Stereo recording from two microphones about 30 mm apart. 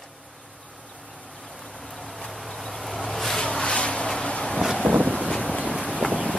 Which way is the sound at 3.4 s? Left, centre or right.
Left.